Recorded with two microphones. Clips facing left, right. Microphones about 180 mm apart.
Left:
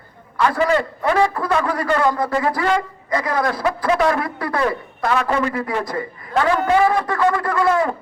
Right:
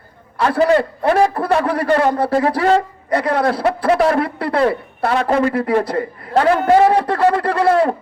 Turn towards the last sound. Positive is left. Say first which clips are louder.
# right 4 dB
turn(degrees=-30)  # may be behind; listen again after turning